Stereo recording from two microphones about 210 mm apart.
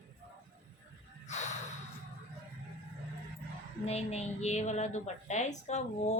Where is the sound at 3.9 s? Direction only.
30° left (ahead or behind).